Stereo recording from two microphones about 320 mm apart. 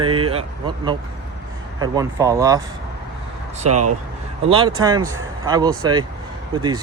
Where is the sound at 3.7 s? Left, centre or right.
Right.